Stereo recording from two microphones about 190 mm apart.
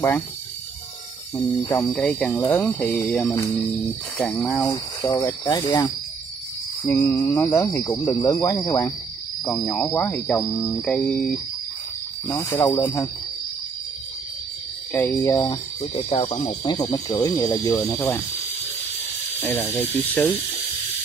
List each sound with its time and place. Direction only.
1.9 s speech: 5° left (ahead or behind)
4.2 s music: centre (ahead or behind)
4.5 s speech: 15° left (ahead or behind)
10.7 s music: 5° left (ahead or behind)
12.3 s speech: 15° left (ahead or behind)
14.9 s speech: 10° left (ahead or behind)
15.9 s speech: 35° left (ahead or behind); by 18.2 s 10° left (ahead or behind)
19.4 s speech: 5° left (ahead or behind)